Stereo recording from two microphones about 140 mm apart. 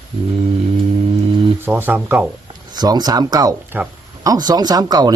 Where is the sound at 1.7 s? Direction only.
15° right (ahead or behind).